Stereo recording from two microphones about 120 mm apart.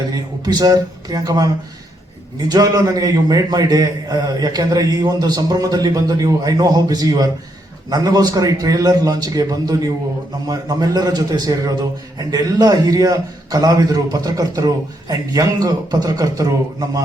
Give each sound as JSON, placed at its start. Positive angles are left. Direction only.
{"t": 0.1, "sound": "a man's voice", "side_deg": -30}
{"t": 2.5, "sound": "a man's voice", "side_deg": -30}